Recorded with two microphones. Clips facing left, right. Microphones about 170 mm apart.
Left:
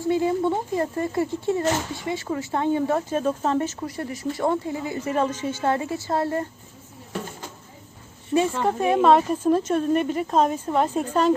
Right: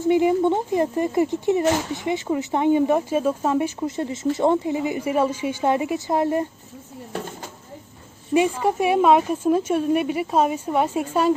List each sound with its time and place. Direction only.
0.0 s speech: 20° right (ahead or behind)
8.3 s speech: 5° right (ahead or behind)